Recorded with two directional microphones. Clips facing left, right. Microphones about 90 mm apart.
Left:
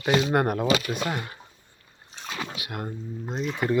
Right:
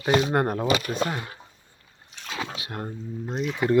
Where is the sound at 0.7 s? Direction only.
40° right (ahead or behind).